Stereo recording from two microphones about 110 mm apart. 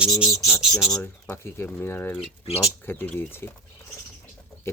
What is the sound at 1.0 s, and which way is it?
Speech, 20° left (ahead or behind).